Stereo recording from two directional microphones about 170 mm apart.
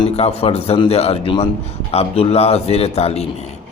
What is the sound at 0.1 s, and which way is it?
A man's voice, 40° left (ahead or behind).